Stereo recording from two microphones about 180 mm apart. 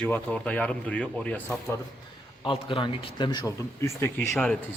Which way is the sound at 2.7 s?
30° left (ahead or behind).